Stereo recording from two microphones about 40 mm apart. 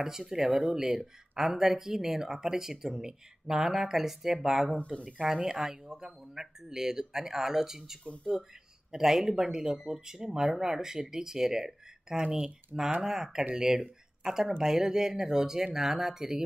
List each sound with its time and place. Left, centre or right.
0.0 s speech: centre
4.7 s speech: left
5.2 s speech: centre
8.0 s speech: left
8.9 s speech: centre